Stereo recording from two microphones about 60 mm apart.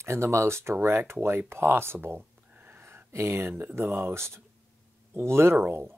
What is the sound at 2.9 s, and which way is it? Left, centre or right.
Speech, right.